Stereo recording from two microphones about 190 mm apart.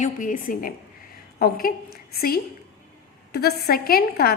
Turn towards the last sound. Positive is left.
turn(degrees=55)  # may be behind; listen again after turning